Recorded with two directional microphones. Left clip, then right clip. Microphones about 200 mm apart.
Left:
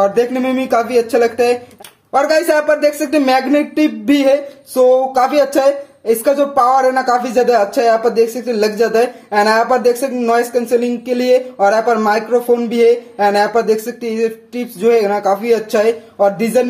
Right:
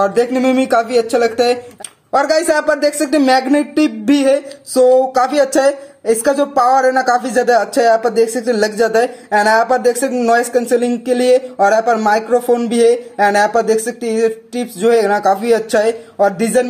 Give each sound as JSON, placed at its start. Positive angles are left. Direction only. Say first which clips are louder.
{"t": 0.0, "sound": "speech", "louder": "even", "side_deg": -20}